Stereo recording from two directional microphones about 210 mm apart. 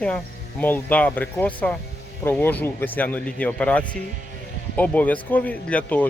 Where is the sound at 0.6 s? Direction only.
10° left (ahead or behind).